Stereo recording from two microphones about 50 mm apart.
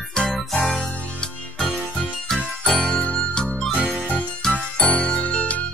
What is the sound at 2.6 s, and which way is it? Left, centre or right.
Jingle, centre.